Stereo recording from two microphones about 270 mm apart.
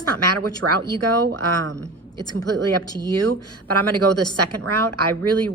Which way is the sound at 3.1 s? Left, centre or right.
Right.